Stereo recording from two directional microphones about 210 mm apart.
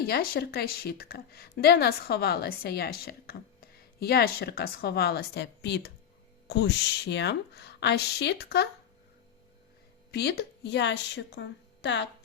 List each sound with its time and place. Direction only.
0.0 s a woman's voice: 50° left (ahead or behind)
10.1 s a woman's voice: 50° left (ahead or behind)